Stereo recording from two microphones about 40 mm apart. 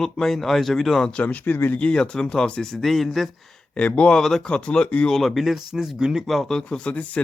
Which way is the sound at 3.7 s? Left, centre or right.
Left.